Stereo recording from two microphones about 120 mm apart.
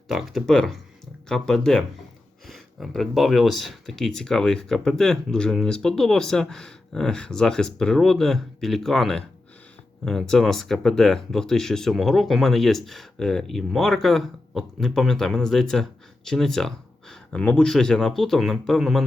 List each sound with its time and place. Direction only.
0.1 s speech: centre (ahead or behind)